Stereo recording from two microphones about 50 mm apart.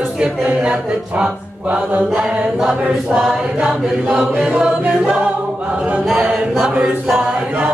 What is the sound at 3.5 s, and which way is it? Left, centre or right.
Choir, centre.